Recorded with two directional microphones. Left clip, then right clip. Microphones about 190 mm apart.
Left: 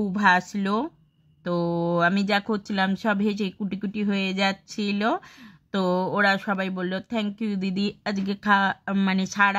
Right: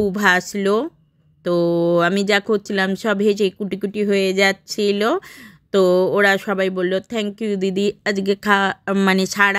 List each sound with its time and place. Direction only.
0.1 s speech: 15° right (ahead or behind)
9.0 s speech: 35° right (ahead or behind)
9.3 s speech: 15° right (ahead or behind)